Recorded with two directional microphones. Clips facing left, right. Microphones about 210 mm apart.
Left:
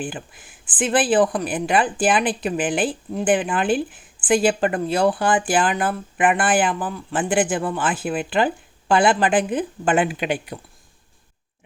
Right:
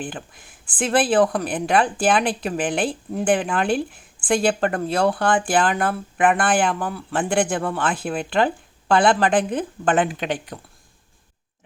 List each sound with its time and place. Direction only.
0.0 s speech: 5° left (ahead or behind)